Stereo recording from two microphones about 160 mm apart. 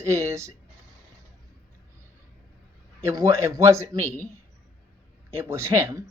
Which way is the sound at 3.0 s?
15° right (ahead or behind).